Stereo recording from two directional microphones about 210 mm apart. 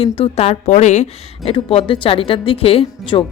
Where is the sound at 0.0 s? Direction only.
30° left (ahead or behind).